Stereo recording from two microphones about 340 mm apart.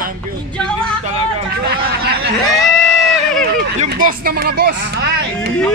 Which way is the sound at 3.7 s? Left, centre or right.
Right.